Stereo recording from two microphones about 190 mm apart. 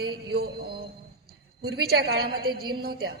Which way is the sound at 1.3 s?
55° right (ahead or behind).